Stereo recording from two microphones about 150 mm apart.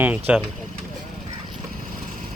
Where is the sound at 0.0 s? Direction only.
10° right (ahead or behind).